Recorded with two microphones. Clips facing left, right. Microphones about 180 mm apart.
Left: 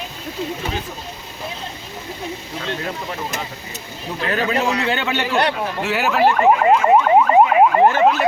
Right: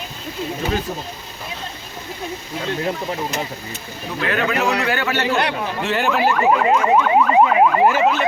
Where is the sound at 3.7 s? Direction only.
35° left (ahead or behind).